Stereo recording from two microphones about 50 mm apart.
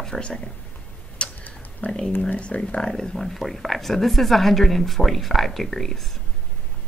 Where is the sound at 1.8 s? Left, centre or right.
Left.